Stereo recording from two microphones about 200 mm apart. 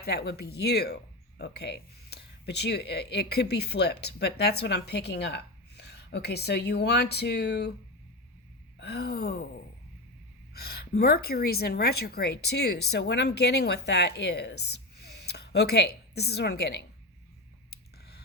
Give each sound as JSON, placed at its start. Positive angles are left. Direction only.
{"t": 0.0, "sound": "speech", "side_deg": 55}
{"t": 8.8, "sound": "speech", "side_deg": 55}
{"t": 10.5, "sound": "speech", "side_deg": 50}
{"t": 17.7, "sound": "a sound", "side_deg": 50}